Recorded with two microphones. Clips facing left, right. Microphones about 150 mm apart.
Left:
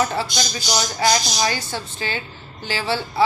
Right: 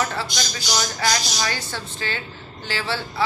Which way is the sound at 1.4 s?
20° left (ahead or behind).